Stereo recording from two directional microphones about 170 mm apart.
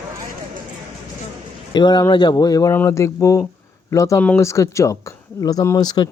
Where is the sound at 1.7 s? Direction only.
25° left (ahead or behind).